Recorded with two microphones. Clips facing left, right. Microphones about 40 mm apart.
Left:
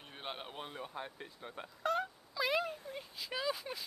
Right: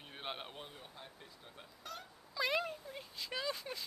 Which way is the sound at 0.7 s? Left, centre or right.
Left.